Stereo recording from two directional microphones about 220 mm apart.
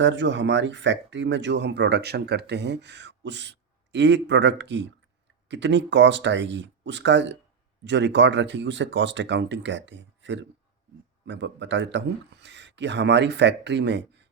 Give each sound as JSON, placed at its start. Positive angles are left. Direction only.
{"t": 0.0, "sound": "speech", "side_deg": -55}